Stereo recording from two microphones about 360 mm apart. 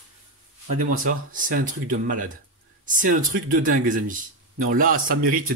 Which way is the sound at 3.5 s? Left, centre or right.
Right.